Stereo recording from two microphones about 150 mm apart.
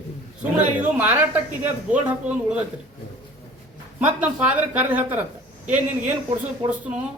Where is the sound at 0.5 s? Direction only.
10° right (ahead or behind).